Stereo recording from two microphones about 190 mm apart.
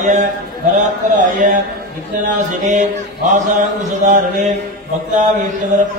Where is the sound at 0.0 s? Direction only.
40° right (ahead or behind).